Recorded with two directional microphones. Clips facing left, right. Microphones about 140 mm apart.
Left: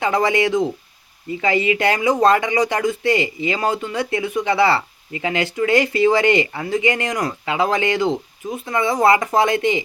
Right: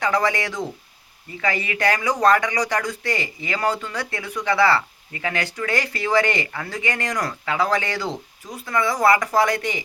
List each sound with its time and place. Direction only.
0.0 s speech: 20° left (ahead or behind)